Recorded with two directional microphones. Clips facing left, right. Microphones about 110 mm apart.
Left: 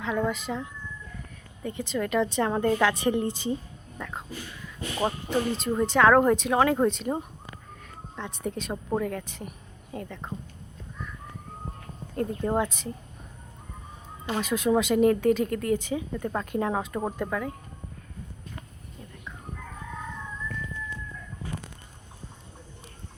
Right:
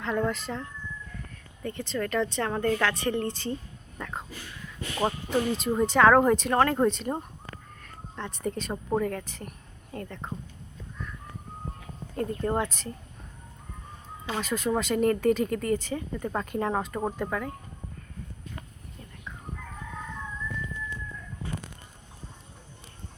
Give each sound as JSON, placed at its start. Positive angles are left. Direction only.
{"t": 0.0, "sound": "a woman's voice", "side_deg": 5}
{"t": 3.9, "sound": "a sound", "side_deg": 0}
{"t": 5.0, "sound": "speech", "side_deg": -5}
{"t": 12.1, "sound": "speech", "side_deg": 0}
{"t": 14.3, "sound": "speech", "side_deg": 0}